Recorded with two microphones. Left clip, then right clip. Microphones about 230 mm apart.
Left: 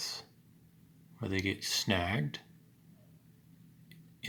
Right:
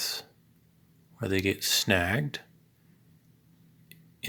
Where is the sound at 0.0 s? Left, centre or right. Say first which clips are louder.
Right 7 dB; centre.